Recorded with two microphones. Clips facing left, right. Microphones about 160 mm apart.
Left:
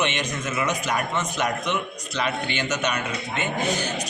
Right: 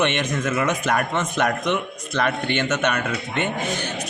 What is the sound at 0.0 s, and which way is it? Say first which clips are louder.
A man's voice: right 4 dB; 55° right (ahead or behind).